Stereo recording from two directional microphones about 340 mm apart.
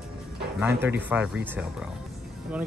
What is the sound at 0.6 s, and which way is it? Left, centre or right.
Speech, centre.